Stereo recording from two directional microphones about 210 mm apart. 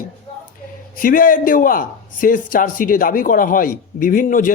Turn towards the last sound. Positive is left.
turn(degrees=40)  # may be behind; listen again after turning